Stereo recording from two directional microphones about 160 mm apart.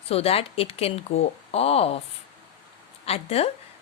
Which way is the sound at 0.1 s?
40° left (ahead or behind).